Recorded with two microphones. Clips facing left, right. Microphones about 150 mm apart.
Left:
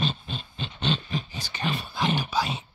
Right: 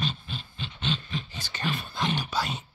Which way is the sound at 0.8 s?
35° left (ahead or behind).